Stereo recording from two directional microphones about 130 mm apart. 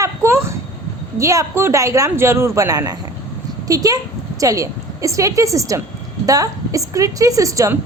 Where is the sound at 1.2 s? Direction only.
25° right (ahead or behind).